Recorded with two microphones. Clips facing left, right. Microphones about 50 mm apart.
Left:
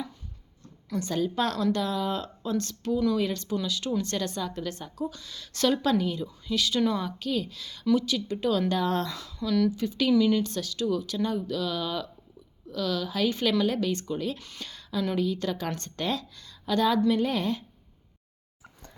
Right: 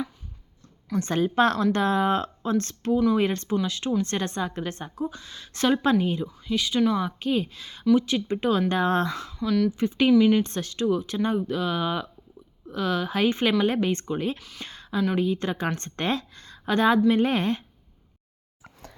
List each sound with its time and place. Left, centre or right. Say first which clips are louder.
0.9 s speech: right 5 dB; right
6.2 s speech: right 1 dB; right
7.2 s speech: right 4 dB; right
9.4 s speech: right 1 dB; centre
9.7 s speech: right 4 dB; right
14.3 s speech: even; centre
14.6 s a sound: right 3 dB; right
15.1 s speech: right 3 dB; right